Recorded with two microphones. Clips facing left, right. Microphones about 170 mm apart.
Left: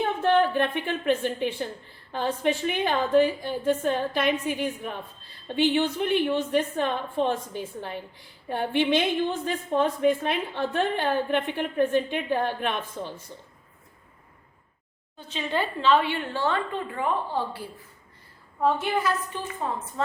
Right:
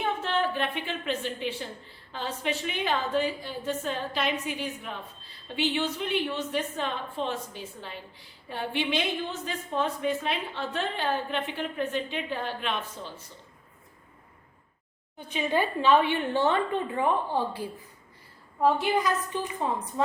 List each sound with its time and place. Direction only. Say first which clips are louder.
0.2 s a woman's voice: left 7 dB; 50° left (ahead or behind)
8.4 s a woman's voice: left 6 dB; 50° left (ahead or behind)
15.3 s a woman's voice: right 2 dB; 15° right (ahead or behind)